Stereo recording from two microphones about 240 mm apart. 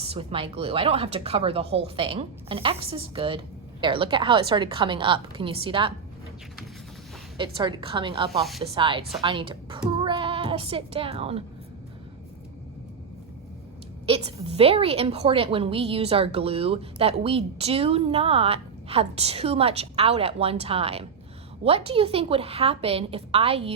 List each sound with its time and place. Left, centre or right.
0.0 s a woman's voice: right
7.3 s a woman's voice: right
8.3 s speech: centre
8.6 s a woman's voice: right
14.1 s a woman's voice: right